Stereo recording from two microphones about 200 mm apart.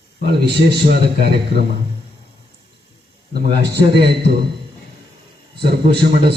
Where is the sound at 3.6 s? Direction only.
55° right (ahead or behind).